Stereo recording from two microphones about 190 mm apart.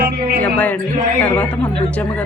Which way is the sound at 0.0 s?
50° right (ahead or behind).